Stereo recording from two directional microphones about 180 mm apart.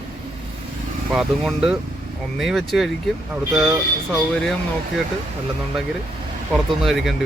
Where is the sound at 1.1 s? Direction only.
5° right (ahead or behind).